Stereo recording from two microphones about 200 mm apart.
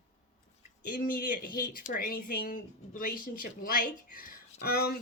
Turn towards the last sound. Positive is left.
turn(degrees=50)  # may be behind; listen again after turning